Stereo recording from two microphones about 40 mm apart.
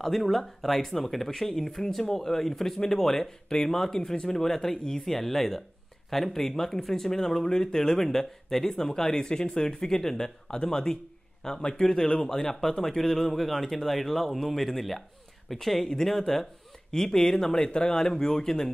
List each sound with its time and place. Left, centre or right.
0.0 s speech: centre
17.5 s speech: left